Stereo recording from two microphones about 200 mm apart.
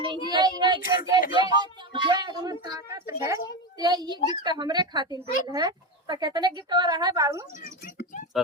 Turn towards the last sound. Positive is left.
turn(degrees=-15)  # may be behind; listen again after turning